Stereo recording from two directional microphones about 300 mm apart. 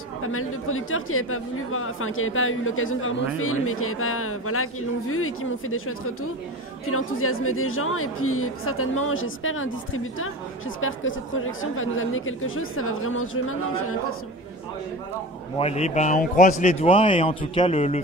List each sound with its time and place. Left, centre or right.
0.2 s speech: left
15.5 s speech: left